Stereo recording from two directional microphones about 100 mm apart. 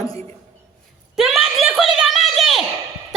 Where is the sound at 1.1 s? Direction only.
Centre (ahead or behind).